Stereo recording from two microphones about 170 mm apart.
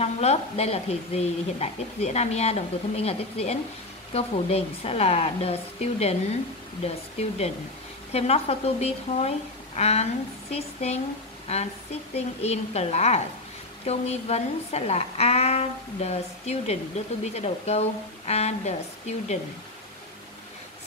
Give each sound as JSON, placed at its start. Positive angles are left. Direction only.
{"t": 0.0, "sound": "a woman's voice", "side_deg": 40}